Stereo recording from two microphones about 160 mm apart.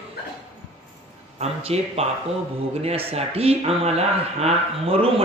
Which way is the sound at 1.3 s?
40° right (ahead or behind).